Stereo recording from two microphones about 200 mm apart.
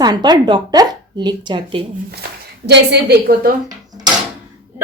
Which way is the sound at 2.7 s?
55° right (ahead or behind).